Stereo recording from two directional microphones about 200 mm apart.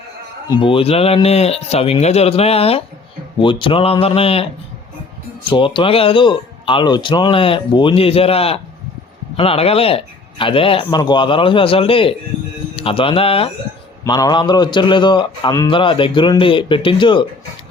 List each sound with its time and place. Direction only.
0.4 s a man's voice: 20° left (ahead or behind)
5.5 s a man's voice: 25° left (ahead or behind)